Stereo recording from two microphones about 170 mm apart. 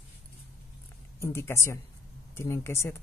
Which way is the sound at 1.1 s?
15° left (ahead or behind).